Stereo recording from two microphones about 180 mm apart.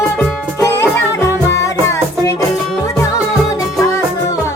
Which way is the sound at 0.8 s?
15° left (ahead or behind).